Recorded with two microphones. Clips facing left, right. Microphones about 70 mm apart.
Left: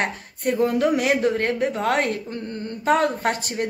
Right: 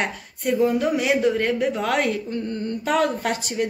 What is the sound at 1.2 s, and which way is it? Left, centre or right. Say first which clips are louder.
A woman's voice: right 1 dB; left.